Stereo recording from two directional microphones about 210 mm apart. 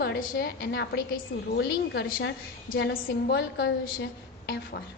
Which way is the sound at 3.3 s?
50° left (ahead or behind).